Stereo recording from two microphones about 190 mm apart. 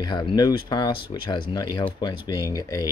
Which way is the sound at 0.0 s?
20° left (ahead or behind).